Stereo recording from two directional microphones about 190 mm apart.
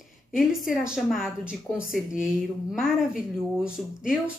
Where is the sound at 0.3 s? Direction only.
5° right (ahead or behind).